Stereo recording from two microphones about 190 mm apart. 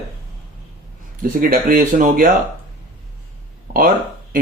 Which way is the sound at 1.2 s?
50° right (ahead or behind).